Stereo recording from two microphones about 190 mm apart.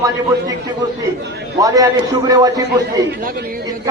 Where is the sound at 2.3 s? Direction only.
20° right (ahead or behind).